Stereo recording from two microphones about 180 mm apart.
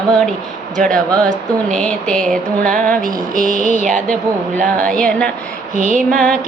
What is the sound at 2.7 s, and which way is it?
Music, 50° right (ahead or behind).